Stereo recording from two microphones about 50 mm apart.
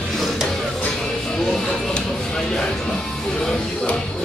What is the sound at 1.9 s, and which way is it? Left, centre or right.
Music, centre.